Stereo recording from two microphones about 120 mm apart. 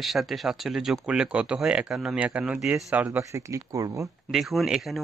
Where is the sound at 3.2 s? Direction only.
25° right (ahead or behind).